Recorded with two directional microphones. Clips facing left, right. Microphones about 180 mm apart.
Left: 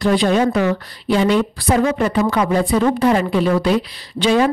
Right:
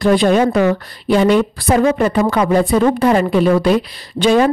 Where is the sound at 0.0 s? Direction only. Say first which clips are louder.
Right 3 dB; 50° right (ahead or behind).